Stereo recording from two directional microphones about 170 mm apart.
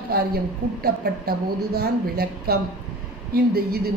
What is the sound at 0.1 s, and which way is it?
A woman's voice, 65° right (ahead or behind).